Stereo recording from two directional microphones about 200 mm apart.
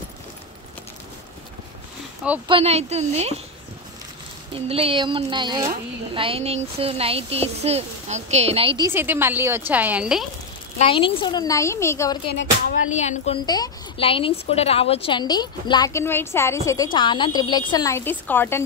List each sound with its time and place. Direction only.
2.4 s speech: 30° right (ahead or behind)
4.6 s a child's voice: 30° right (ahead or behind)
8.9 s a woman's voice: 10° right (ahead or behind)
10.8 s a woman's voice: 25° left (ahead or behind)
12.9 s a woman's voice: 35° left (ahead or behind)
13.5 s a woman's voice: 25° left (ahead or behind)